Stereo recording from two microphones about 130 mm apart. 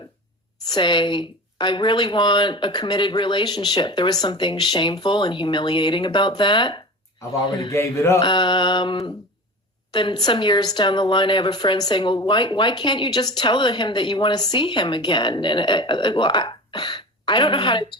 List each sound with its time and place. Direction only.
0.7 s a woman's voice: 35° left (ahead or behind)
7.7 s a sound: 20° left (ahead or behind)
8.2 s a woman's voice: 35° left (ahead or behind)